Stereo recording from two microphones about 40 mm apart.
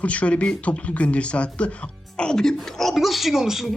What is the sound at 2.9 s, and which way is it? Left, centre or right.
Speech, centre.